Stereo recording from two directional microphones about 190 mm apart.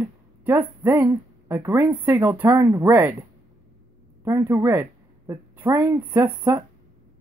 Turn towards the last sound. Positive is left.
turn(degrees=-10)  # may be behind; listen again after turning